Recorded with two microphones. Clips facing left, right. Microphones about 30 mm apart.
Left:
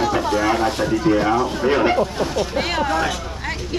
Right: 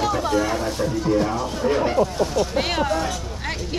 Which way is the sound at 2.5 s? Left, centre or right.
Centre.